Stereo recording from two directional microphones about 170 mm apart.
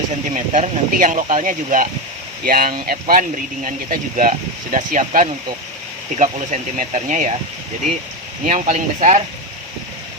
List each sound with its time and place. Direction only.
0.3 s speech: 50° right (ahead or behind)
8.4 s speech: 40° right (ahead or behind)